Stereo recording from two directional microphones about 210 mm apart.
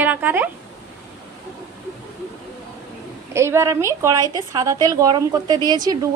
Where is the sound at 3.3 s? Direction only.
15° right (ahead or behind).